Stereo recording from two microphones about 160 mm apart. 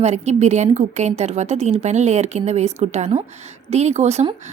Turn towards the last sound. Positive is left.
turn(degrees=-45)  # may be behind; listen again after turning